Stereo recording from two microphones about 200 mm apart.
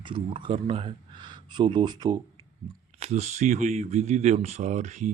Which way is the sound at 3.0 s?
35° right (ahead or behind).